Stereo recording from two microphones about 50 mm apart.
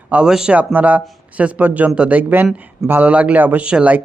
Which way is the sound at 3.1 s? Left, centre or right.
Right.